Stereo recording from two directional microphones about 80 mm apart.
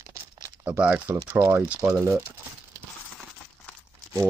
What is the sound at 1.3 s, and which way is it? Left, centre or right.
Speech, right.